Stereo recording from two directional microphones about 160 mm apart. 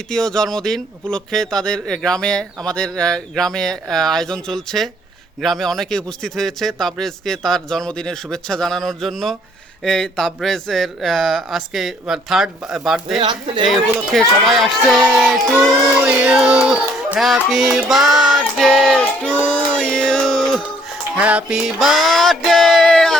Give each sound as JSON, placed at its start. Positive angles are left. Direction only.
{"t": 0.1, "sound": "speech", "side_deg": 5}
{"t": 13.1, "sound": "speech", "side_deg": -30}
{"t": 14.1, "sound": "speech", "side_deg": 0}
{"t": 16.0, "sound": "music", "side_deg": -5}
{"t": 16.6, "sound": "speech", "side_deg": -5}
{"t": 17.8, "sound": "music", "side_deg": 0}